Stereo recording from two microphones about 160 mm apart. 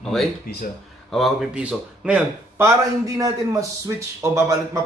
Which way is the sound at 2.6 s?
20° right (ahead or behind).